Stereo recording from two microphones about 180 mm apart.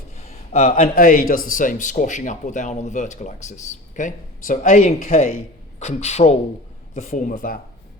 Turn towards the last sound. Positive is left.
turn(degrees=55)  # may be behind; listen again after turning